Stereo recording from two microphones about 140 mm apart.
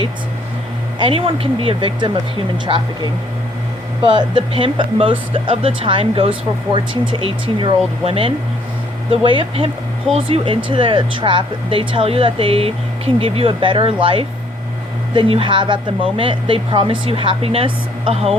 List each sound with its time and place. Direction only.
0.9 s speech: 40° right (ahead or behind)
4.0 s speech: 35° right (ahead or behind)